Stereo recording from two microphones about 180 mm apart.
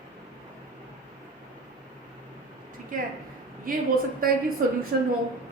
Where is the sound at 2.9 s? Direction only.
50° right (ahead or behind).